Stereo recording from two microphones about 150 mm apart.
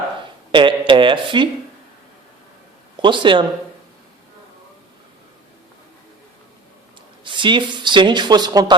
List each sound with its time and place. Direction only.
0.5 s speech: 35° right (ahead or behind)
3.0 s speech: 35° right (ahead or behind)
7.3 s speech: 30° right (ahead or behind)